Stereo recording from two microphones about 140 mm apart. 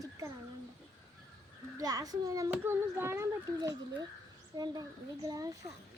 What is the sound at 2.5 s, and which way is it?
A child's voice, 15° right (ahead or behind).